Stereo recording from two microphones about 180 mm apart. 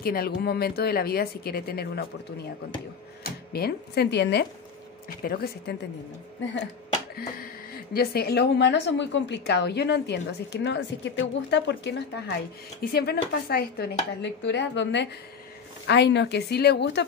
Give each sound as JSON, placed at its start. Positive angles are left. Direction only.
{"t": 0.0, "sound": "speech", "side_deg": 55}
{"t": 3.3, "sound": "speech", "side_deg": 60}
{"t": 5.2, "sound": "speech", "side_deg": 55}
{"t": 7.2, "sound": "speech", "side_deg": 55}
{"t": 12.9, "sound": "speech", "side_deg": 65}